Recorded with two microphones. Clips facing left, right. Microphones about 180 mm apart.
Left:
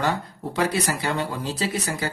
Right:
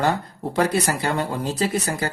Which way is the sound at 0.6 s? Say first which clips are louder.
Right 3 dB; 45° right (ahead or behind).